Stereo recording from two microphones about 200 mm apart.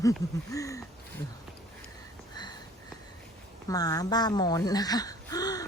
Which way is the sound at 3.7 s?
20° left (ahead or behind).